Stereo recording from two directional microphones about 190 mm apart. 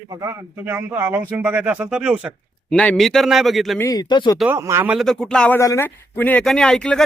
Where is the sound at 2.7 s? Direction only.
5° left (ahead or behind).